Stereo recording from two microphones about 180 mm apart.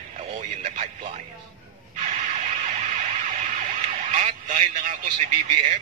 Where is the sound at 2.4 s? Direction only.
40° right (ahead or behind).